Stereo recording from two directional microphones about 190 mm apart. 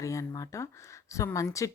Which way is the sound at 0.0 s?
15° left (ahead or behind).